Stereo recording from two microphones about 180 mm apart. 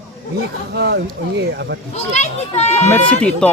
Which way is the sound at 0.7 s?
65° right (ahead or behind).